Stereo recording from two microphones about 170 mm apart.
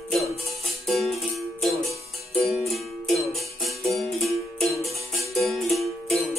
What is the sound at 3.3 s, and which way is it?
Music, centre (ahead or behind).